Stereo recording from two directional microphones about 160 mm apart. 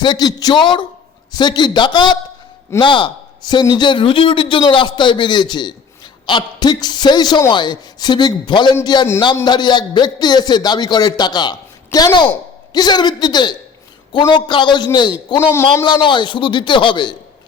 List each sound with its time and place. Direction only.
0.0 s a man's voice: 25° left (ahead or behind)